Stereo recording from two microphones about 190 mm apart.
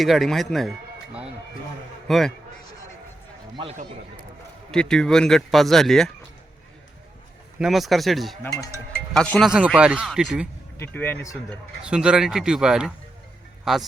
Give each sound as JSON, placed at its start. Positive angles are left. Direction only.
{"t": 0.0, "sound": "speech", "side_deg": 0}
{"t": 2.0, "sound": "speech", "side_deg": 0}
{"t": 3.6, "sound": "a man's voice", "side_deg": -30}
{"t": 4.7, "sound": "speech", "side_deg": 5}
{"t": 7.6, "sound": "speech", "side_deg": 0}
{"t": 8.4, "sound": "speech", "side_deg": 20}
{"t": 9.1, "sound": "speech", "side_deg": 5}
{"t": 10.8, "sound": "speech", "side_deg": 10}
{"t": 11.4, "sound": "speech", "side_deg": -5}